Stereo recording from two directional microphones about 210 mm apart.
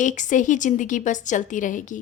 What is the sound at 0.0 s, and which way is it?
A woman's voice, 35° left (ahead or behind).